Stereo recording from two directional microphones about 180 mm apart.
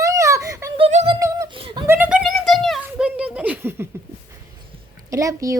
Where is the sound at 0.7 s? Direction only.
35° right (ahead or behind).